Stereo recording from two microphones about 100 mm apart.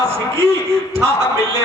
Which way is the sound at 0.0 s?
25° right (ahead or behind).